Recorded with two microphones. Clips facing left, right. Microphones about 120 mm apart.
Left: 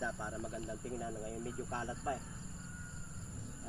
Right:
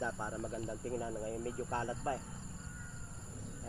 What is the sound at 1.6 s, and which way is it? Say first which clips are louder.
Speech: right 2 dB; 55° right (ahead or behind).